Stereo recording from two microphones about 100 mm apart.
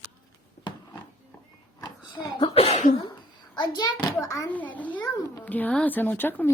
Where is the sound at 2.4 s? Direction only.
80° left.